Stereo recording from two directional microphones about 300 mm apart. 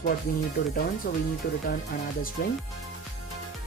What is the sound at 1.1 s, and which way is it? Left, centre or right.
Speech, left.